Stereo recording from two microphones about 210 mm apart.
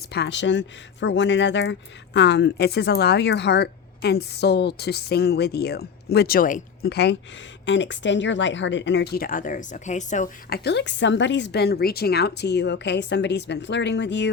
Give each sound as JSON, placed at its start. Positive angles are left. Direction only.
{"t": 0.1, "sound": "a woman's voice", "side_deg": 55}
{"t": 10.6, "sound": "a woman's voice", "side_deg": 55}